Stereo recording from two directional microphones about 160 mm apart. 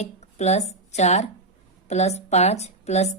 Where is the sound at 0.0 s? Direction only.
45° left (ahead or behind).